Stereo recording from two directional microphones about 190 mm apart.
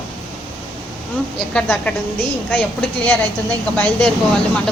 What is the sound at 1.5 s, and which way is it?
A woman's voice, 5° left (ahead or behind).